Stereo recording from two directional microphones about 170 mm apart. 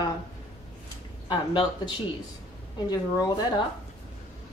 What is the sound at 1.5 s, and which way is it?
Speech, 30° left (ahead or behind).